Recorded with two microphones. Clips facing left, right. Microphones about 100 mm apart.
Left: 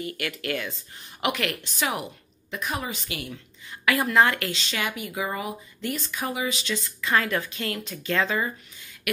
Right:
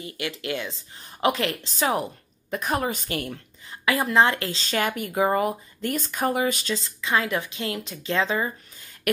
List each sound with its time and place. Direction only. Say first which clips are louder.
0.0 s a woman's voice: even; 25° right (ahead or behind)
2.5 s speech: right 5 dB; 45° right (ahead or behind)
3.8 s speech: right 1 dB; 25° right (ahead or behind); by 6.7 s 45° right (ahead or behind)
6.7 s a woman's voice: even; 25° right (ahead or behind)
9.1 s a sound: right 5 dB; 40° right (ahead or behind)